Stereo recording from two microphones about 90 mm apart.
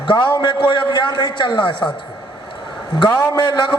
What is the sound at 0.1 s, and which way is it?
A man's voice, 60° left (ahead or behind).